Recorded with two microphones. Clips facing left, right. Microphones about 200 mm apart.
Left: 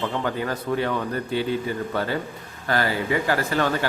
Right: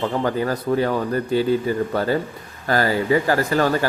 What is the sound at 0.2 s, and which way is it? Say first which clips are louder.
Speech: right 5 dB; 40° right (ahead or behind).